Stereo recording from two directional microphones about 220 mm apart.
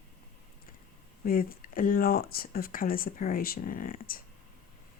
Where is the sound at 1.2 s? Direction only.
40° left (ahead or behind).